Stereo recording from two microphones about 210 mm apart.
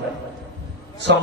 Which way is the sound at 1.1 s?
55° right (ahead or behind).